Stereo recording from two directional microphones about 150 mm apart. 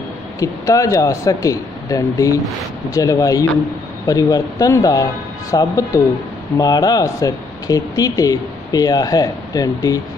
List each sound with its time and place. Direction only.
0.4 s speech: 20° left (ahead or behind)